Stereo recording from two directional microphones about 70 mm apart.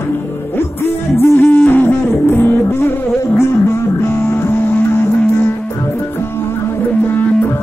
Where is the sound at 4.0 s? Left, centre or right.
Left.